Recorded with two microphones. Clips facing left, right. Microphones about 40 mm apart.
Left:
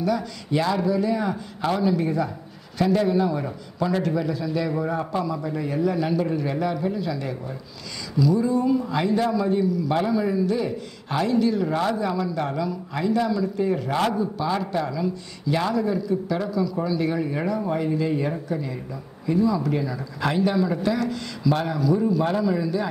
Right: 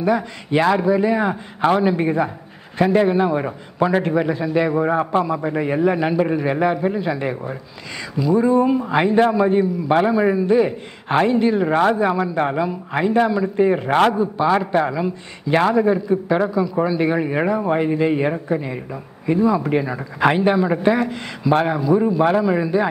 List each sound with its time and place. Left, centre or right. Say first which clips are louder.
0.0 s a man's voice: right 5 dB; right
14.1 s a man's voice: right 7 dB; right